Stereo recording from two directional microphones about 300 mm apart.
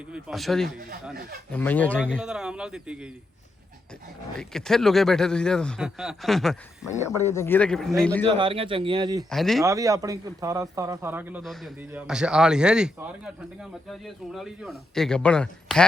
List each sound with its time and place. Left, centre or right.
0.1 s speech: centre
4.4 s speech: centre
8.3 s speech: centre
9.3 s speech: centre
9.6 s speech: centre